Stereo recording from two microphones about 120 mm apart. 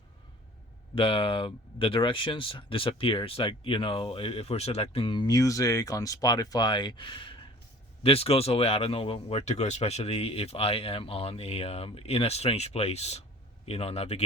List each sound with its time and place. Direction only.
0.9 s speech: 50° left (ahead or behind)
5.2 s speech: 30° left (ahead or behind); by 14.3 s 60° left (ahead or behind)